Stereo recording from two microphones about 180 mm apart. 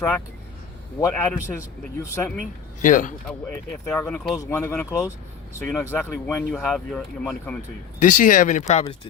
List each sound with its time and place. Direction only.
0.9 s speech: 10° left (ahead or behind)
2.8 s speech: 45° left (ahead or behind)
3.2 s speech: 10° left (ahead or behind)
7.9 s speech: 45° left (ahead or behind)